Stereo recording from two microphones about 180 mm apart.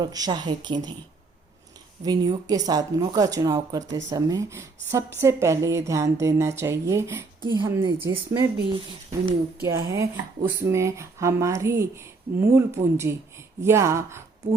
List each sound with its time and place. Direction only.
0.0 s speech: 20° right (ahead or behind)
2.0 s speech: 20° right (ahead or behind)
3.8 s speech: 90° right
4.1 s speech: 20° right (ahead or behind)
9.6 s speech: 15° right (ahead or behind)